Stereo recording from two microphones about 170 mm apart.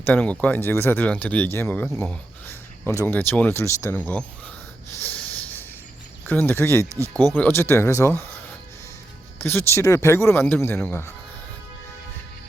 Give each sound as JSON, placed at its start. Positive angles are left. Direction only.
{"t": 0.0, "sound": "speech", "side_deg": 10}
{"t": 5.0, "sound": "snort", "side_deg": 10}
{"t": 6.2, "sound": "speech", "side_deg": 10}
{"t": 7.1, "sound": "speech", "side_deg": -25}
{"t": 7.3, "sound": "speech", "side_deg": 10}